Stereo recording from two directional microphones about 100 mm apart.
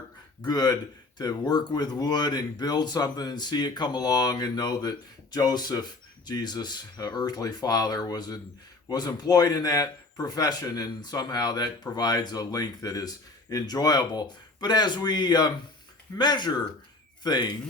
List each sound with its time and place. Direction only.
0.4 s speech: 40° left (ahead or behind)